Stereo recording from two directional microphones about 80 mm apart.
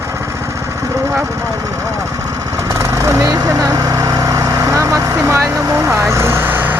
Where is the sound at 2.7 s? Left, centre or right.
Right.